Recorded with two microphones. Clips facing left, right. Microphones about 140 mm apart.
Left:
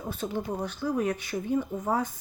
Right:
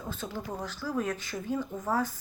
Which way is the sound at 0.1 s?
15° left (ahead or behind).